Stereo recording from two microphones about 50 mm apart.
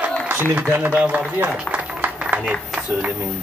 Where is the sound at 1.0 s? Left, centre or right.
Right.